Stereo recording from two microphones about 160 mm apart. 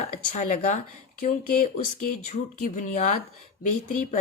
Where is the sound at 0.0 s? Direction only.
50° left (ahead or behind).